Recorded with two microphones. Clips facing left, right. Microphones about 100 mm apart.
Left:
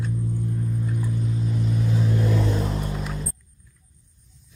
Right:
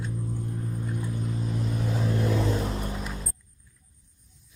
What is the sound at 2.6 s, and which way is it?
Music, 35° left (ahead or behind).